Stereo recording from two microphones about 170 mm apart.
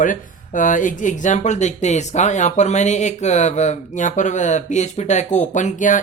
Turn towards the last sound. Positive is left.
turn(degrees=50)  # may be behind; listen again after turning